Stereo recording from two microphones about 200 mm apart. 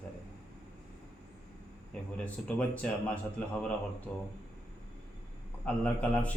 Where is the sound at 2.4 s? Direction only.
5° left (ahead or behind).